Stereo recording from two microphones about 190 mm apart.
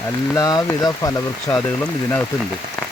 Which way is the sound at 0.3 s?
20° left (ahead or behind).